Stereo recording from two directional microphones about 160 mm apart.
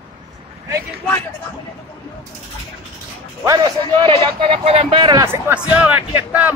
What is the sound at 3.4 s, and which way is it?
A man's voice, 25° right (ahead or behind).